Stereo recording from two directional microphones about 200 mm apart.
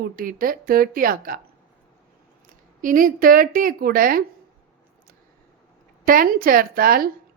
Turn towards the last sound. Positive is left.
turn(degrees=-45)  # may be behind; listen again after turning